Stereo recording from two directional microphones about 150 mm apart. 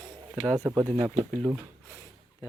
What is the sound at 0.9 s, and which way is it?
Speech, 40° right (ahead or behind).